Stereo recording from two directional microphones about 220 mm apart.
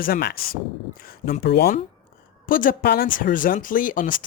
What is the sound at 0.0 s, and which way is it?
Speech, 45° left (ahead or behind).